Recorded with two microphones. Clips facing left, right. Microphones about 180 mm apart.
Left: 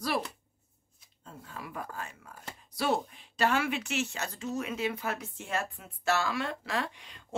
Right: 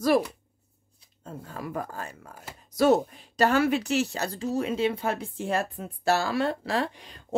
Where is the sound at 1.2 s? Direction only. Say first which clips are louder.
Right 7 dB; 40° right (ahead or behind).